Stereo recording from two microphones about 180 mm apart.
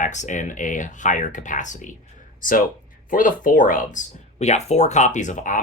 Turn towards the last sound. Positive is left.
turn(degrees=45)  # may be behind; listen again after turning